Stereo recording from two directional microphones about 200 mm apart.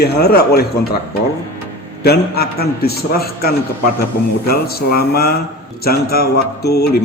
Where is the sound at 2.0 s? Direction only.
50° left (ahead or behind).